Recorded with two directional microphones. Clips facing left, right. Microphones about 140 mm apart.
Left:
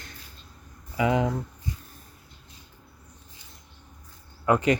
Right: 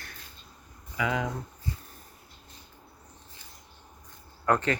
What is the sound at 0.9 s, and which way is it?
Speech, 25° left (ahead or behind).